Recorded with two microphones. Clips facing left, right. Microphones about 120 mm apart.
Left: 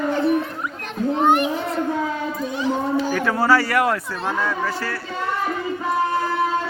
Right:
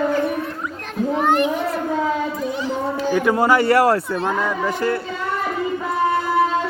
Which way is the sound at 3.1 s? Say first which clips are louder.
Right 4 dB; 15° right (ahead or behind).